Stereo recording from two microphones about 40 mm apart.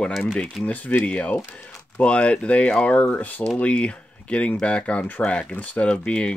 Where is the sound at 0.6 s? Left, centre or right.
Left.